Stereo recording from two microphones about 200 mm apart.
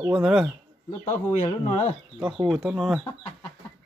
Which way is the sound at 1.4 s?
30° left (ahead or behind).